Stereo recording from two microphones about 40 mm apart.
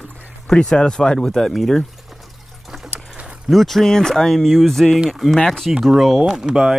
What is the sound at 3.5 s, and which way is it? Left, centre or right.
Speech, centre.